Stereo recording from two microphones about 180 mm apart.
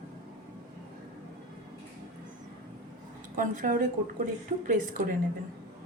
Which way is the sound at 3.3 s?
50° right (ahead or behind).